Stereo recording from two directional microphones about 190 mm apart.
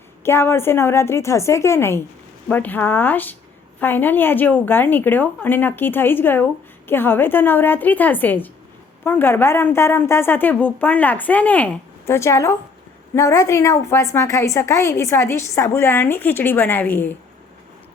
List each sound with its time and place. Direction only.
0.3 s a woman's voice: 15° left (ahead or behind)